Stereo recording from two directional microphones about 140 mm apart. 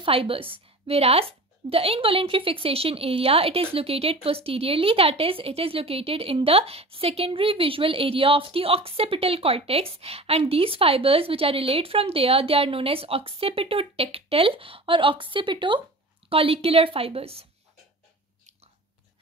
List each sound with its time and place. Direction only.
0.0 s a woman's voice: 40° right (ahead or behind)